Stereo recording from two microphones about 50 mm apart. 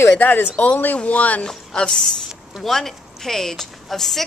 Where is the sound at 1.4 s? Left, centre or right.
Centre.